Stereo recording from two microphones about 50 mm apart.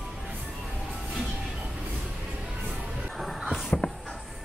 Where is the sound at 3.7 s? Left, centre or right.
Left.